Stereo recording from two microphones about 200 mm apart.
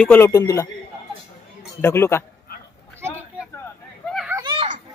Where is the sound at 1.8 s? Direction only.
10° left (ahead or behind).